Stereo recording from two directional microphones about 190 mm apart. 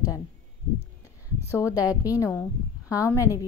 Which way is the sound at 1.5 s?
15° left (ahead or behind).